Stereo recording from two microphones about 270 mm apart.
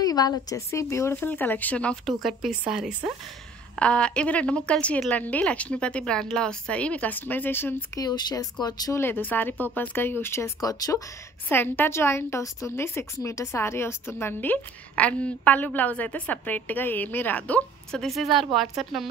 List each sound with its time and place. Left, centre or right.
0.0 s a woman's voice: centre